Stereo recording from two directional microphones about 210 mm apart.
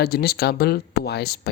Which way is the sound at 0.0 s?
45° left (ahead or behind).